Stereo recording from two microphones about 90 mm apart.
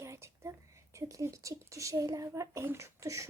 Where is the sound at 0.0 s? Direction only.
30° right (ahead or behind).